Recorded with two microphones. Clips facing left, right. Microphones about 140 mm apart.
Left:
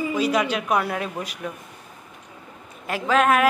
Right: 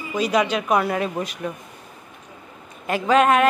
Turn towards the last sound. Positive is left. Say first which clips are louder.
# right 2 dB
turn(degrees=0)  # may be behind; listen again after turning